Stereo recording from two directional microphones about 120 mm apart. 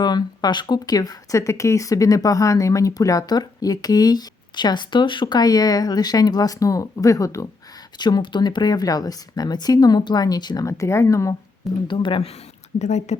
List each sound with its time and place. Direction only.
0.0 s speech: 35° left (ahead or behind)
7.9 s speech: 35° left (ahead or behind)
11.9 s speech: 45° left (ahead or behind)
12.8 s a woman's voice: 70° left (ahead or behind)